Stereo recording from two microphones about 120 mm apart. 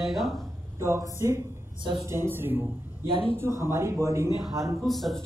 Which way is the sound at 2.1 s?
20° right (ahead or behind).